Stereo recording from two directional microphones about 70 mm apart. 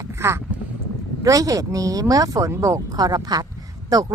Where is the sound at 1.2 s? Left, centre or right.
Right.